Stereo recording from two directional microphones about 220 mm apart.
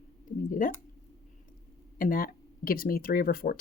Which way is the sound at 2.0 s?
40° left (ahead or behind).